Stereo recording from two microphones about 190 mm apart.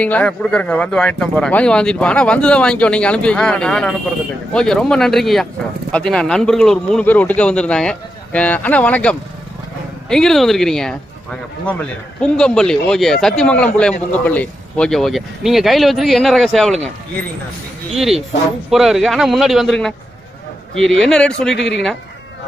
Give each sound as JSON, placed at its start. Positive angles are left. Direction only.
{"t": 0.0, "sound": "speech", "side_deg": 5}
{"t": 18.7, "sound": "speech", "side_deg": 0}
{"t": 21.5, "sound": "speech", "side_deg": 65}